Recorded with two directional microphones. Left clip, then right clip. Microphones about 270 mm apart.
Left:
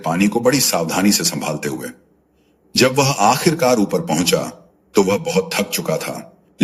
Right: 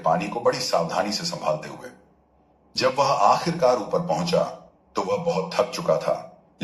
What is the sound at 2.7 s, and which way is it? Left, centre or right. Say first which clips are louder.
Speech: left 5 dB; left.